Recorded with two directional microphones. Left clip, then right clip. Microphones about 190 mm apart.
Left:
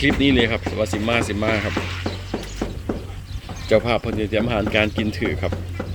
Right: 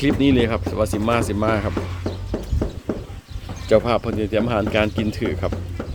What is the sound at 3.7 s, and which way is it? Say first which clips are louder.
Speech: right 1 dB; 5° right (ahead or behind).